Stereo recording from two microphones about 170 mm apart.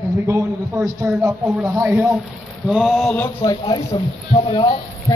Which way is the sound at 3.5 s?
25° left (ahead or behind).